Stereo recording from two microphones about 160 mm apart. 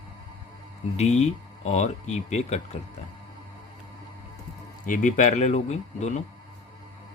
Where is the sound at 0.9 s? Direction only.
45° left (ahead or behind).